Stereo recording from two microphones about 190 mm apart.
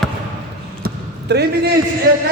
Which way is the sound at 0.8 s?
60° right (ahead or behind).